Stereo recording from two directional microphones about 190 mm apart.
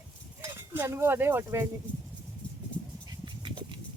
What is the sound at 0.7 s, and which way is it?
Speech, 15° right (ahead or behind).